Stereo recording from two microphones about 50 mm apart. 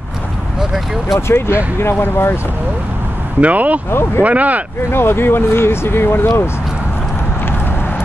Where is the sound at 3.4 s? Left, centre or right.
Right.